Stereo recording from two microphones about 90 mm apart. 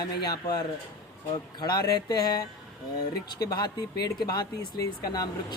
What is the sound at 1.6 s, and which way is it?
Speech, 50° left (ahead or behind).